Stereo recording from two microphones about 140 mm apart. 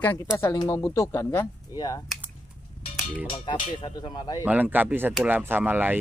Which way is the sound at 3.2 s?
35° left (ahead or behind).